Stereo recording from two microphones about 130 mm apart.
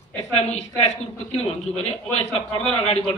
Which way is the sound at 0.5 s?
55° left (ahead or behind).